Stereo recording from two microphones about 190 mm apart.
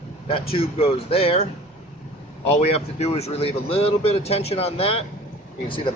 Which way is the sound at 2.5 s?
35° left (ahead or behind).